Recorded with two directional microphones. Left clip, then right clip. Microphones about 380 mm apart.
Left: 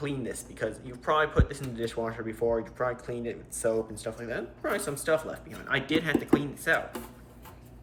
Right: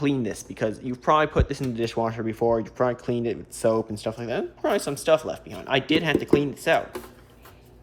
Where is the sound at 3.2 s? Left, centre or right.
Right.